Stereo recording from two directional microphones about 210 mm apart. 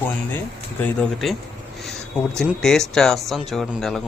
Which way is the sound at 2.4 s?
Centre (ahead or behind).